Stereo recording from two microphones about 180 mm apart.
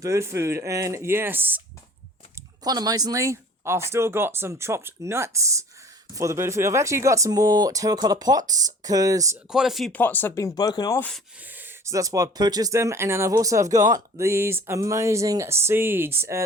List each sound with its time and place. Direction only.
0.0 s speech: 15° right (ahead or behind)
2.6 s speech: 20° right (ahead or behind)
9.5 s speech: centre (ahead or behind); by 11.0 s 20° left (ahead or behind)
11.3 s speech: 10° right (ahead or behind)